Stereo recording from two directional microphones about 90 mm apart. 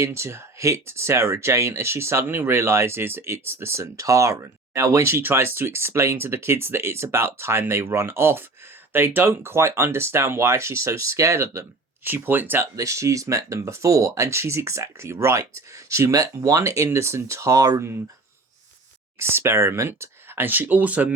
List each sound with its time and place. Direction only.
0.0 s speech: 30° right (ahead or behind)
12.0 s speech: 20° right (ahead or behind)
12.7 s speech: 35° right (ahead or behind)
19.2 s speech: 30° right (ahead or behind)